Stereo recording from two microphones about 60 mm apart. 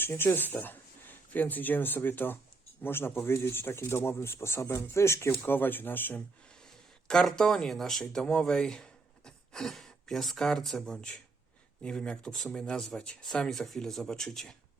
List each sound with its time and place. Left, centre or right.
0.2 s speech: left
5.5 s speech: left
6.6 s speech: centre